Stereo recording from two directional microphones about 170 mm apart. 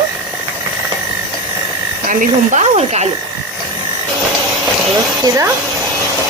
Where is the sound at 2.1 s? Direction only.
50° right (ahead or behind).